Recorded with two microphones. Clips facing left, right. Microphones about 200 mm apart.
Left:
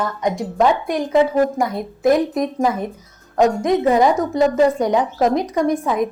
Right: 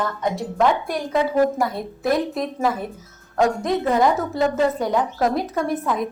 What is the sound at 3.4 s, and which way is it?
Speech, 20° left (ahead or behind).